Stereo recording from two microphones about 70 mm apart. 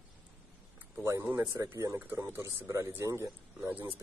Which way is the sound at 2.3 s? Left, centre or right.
Right.